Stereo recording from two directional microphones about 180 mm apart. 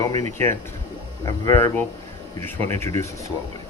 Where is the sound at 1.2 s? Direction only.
20° left (ahead or behind).